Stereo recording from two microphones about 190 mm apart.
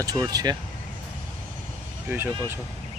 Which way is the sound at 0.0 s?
20° right (ahead or behind).